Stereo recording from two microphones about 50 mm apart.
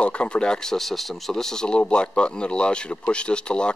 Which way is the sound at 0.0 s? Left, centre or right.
Left.